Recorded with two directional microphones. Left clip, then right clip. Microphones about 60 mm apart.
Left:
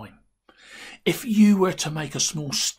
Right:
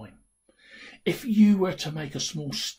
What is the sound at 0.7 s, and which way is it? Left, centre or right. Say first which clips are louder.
Speech: left 4 dB; left.